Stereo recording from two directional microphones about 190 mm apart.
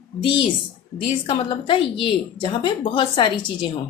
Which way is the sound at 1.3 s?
25° left (ahead or behind).